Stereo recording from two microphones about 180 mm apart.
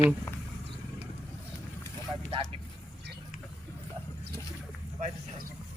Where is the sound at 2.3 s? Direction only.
35° right (ahead or behind).